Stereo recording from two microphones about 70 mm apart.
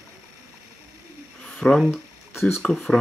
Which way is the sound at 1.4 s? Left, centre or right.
Centre.